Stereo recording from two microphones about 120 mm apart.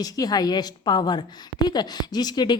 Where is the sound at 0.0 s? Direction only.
30° left (ahead or behind).